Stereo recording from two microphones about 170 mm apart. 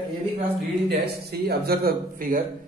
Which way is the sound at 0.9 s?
70° right (ahead or behind).